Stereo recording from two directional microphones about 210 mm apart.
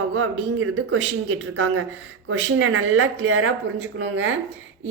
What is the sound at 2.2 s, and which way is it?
A woman's voice, 70° right (ahead or behind).